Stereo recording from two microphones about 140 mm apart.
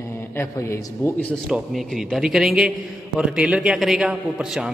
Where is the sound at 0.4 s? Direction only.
20° left (ahead or behind).